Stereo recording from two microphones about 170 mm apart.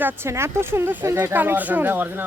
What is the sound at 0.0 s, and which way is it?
Speech, 10° right (ahead or behind).